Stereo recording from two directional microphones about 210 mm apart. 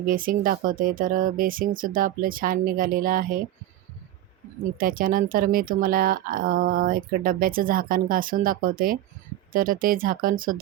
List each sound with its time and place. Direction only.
0.0 s speech: 40° right (ahead or behind)
4.8 s speech: 40° right (ahead or behind)